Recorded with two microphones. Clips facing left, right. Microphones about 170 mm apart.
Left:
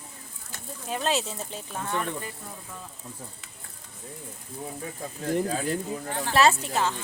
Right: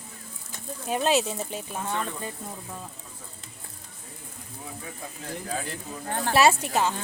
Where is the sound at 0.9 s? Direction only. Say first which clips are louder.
Right 4 dB; 15° right (ahead or behind).